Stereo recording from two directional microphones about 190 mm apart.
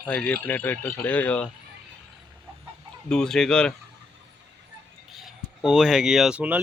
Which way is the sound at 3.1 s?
5° left (ahead or behind).